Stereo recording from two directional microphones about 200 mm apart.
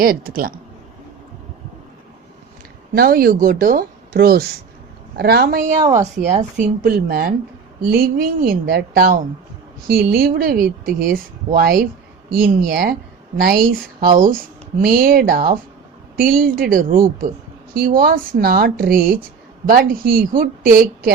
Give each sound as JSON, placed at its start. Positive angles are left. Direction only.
{"t": 0.0, "sound": "speech", "side_deg": -45}
{"t": 2.9, "sound": "speech", "side_deg": -50}
{"t": 5.8, "sound": "a woman's voice", "side_deg": -20}
{"t": 6.3, "sound": "speech", "side_deg": -45}
{"t": 14.8, "sound": "speech", "side_deg": -45}